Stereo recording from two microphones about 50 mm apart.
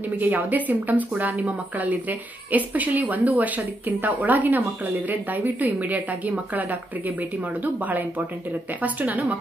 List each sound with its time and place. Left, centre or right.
0.2 s speech: right